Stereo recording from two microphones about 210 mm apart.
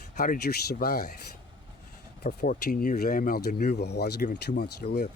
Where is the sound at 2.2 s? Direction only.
45° left (ahead or behind).